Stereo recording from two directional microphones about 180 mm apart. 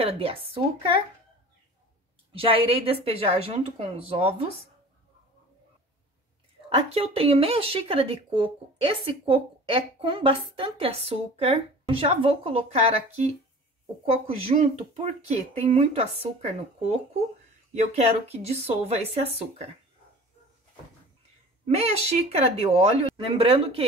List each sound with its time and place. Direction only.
0.0 s a woman's voice: 30° right (ahead or behind)
2.3 s speech: 30° right (ahead or behind)
6.7 s speech: 35° right (ahead or behind)
14.2 s speech: 35° right (ahead or behind)
17.9 s speech: 35° right (ahead or behind)
21.6 s speech: 35° right (ahead or behind)